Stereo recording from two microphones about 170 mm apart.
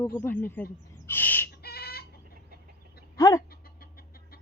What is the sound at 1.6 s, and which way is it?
Chicken, 70° left (ahead or behind).